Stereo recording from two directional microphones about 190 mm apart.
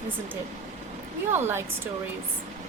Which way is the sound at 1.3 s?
10° right (ahead or behind).